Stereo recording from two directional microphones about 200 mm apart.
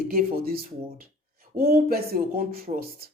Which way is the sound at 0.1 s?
45° right (ahead or behind).